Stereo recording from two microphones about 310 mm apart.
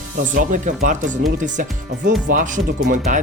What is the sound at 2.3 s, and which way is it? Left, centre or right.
Speech, right.